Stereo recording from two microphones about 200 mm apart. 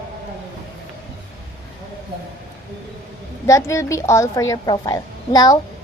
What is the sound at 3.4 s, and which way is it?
A woman's voice, 15° left (ahead or behind).